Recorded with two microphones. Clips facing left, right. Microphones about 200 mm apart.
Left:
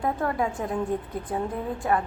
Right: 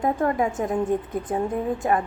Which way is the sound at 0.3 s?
20° right (ahead or behind).